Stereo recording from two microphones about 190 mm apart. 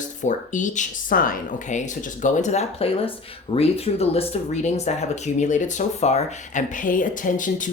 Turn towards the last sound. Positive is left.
turn(degrees=45)  # may be behind; listen again after turning